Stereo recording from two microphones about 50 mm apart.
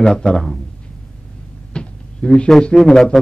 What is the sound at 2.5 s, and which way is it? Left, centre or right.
Speech, centre.